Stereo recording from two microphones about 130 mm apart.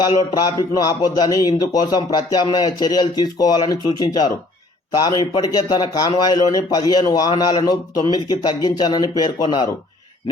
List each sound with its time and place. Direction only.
0.0 s speech: 35° left (ahead or behind)